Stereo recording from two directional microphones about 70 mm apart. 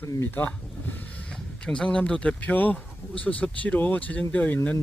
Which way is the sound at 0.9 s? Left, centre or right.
Left.